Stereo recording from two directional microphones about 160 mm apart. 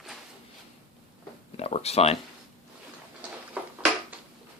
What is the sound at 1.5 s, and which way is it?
Speech, 40° left (ahead or behind).